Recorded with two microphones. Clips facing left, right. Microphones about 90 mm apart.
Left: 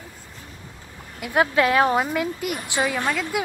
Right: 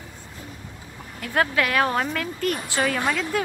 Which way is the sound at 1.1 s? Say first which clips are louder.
Left 3 dB; 15° left (ahead or behind).